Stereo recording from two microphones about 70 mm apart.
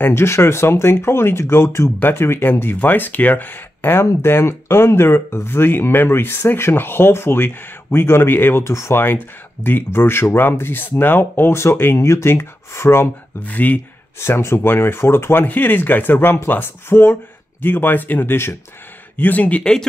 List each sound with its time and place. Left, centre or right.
0.0 s speech: left
13.4 s speech: left
14.2 s speech: left
19.6 s speech: centre